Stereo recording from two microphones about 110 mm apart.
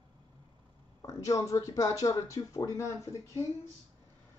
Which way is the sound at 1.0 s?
30° left (ahead or behind).